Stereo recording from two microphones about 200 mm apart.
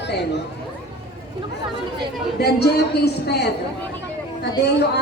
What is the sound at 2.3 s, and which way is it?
Speech, 55° left (ahead or behind).